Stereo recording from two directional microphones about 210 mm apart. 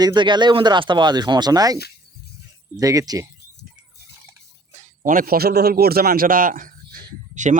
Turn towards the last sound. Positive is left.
turn(degrees=-35)  # may be behind; listen again after turning